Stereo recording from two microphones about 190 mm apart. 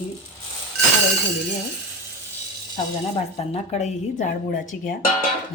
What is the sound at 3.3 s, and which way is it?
A woman's voice, 35° left (ahead or behind).